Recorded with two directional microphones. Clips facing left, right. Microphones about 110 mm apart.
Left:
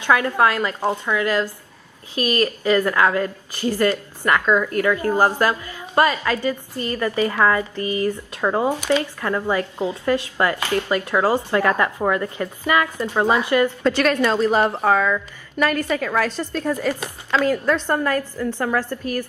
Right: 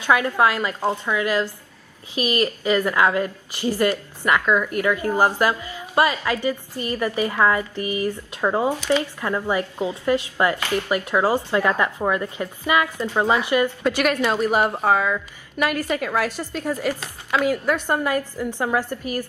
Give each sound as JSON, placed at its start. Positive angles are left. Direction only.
{"t": 0.0, "sound": "a woman's voice", "side_deg": -15}
{"t": 0.7, "sound": "speech", "side_deg": 15}
{"t": 1.0, "sound": "a woman's voice", "side_deg": -15}
{"t": 8.5, "sound": "speech", "side_deg": 15}
{"t": 8.9, "sound": "a woman's voice", "side_deg": -15}